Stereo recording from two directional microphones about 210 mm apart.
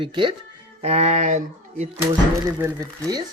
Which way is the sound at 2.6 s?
15° right (ahead or behind).